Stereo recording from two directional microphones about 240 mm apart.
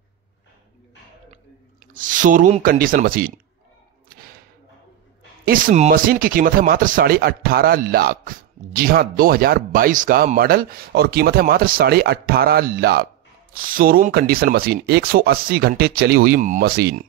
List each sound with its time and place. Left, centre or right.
2.0 s speech: right
5.5 s speech: right